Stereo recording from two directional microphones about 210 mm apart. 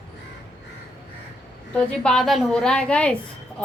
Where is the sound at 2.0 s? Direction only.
Centre (ahead or behind).